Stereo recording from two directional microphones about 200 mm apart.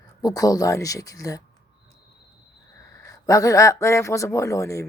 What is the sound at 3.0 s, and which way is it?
Speech, 15° left (ahead or behind).